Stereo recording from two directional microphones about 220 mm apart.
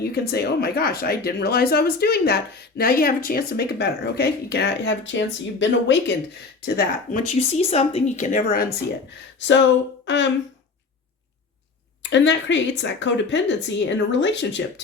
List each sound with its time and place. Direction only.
0.1 s speech: 45° left (ahead or behind)
6.7 s speech: 40° left (ahead or behind)
9.4 s speech: 55° left (ahead or behind)
12.1 s speech: 55° left (ahead or behind)